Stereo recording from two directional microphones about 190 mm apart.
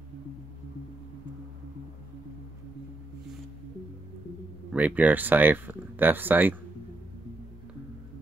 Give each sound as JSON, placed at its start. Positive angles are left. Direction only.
{"t": 4.7, "sound": "speech", "side_deg": -10}